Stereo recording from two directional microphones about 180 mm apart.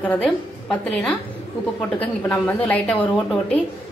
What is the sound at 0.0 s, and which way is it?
A woman's voice, 5° left (ahead or behind).